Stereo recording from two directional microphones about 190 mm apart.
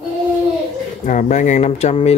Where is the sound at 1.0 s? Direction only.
40° left (ahead or behind).